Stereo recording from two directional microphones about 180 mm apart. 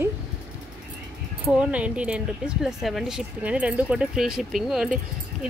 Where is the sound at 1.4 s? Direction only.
5° right (ahead or behind).